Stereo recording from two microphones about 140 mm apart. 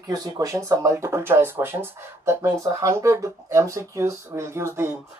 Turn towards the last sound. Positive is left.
turn(degrees=-15)  # may be behind; listen again after turning